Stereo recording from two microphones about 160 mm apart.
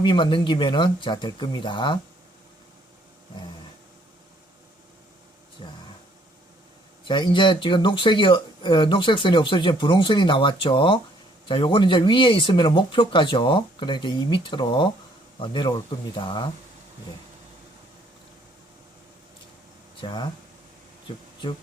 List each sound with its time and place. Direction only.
0.0 s speech: 30° left (ahead or behind)
5.6 s speech: 30° left (ahead or behind)
7.1 s speech: 30° left (ahead or behind)
20.0 s speech: 30° left (ahead or behind)